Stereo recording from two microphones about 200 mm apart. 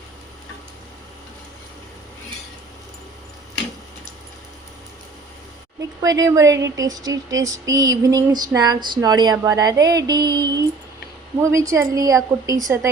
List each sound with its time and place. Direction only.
6.0 s speech: 20° right (ahead or behind)